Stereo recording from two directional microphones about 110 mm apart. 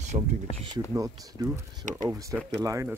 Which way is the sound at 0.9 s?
30° right (ahead or behind).